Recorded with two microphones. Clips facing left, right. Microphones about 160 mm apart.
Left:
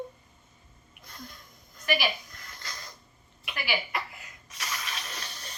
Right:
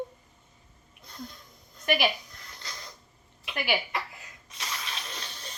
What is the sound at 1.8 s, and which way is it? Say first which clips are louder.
Speech: right 3 dB; 55° right (ahead or behind).